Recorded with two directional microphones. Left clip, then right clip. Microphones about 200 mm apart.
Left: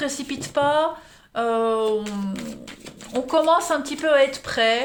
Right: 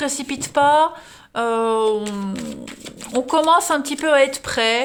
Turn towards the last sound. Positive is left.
turn(degrees=-40)  # may be behind; listen again after turning